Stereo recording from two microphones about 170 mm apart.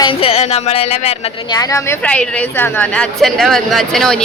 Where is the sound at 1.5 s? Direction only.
20° left (ahead or behind).